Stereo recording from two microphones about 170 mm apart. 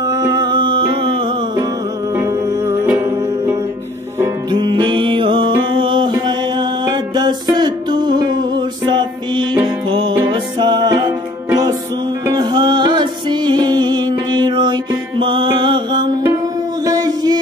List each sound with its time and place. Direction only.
0.1 s music: 25° right (ahead or behind)
2.7 s music: 15° right (ahead or behind)
4.5 s music: 25° right (ahead or behind)